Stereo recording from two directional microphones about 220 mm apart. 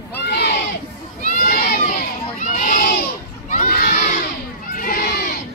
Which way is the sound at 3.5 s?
35° left (ahead or behind).